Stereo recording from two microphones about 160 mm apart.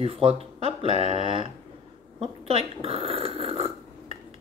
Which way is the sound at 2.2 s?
40° right (ahead or behind).